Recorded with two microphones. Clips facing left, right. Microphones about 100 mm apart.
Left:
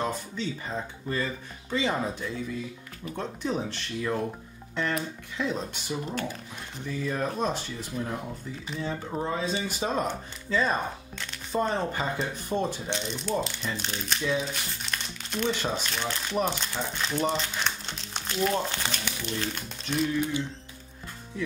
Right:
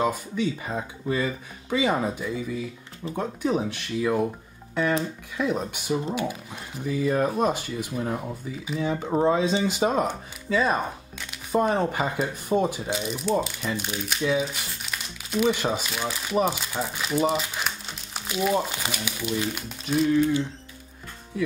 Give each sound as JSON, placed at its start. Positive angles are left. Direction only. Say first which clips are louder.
{"t": 0.0, "sound": "speech", "louder": "right 6 dB", "side_deg": -10}
{"t": 5.4, "sound": "speech", "louder": "right 4 dB", "side_deg": -10}
{"t": 9.4, "sound": "speech", "louder": "right 7 dB", "side_deg": -20}
{"t": 9.8, "sound": "speech", "louder": "right 4 dB", "side_deg": -10}